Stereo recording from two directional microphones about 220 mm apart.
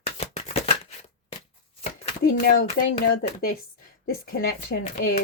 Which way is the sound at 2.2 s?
40° left (ahead or behind).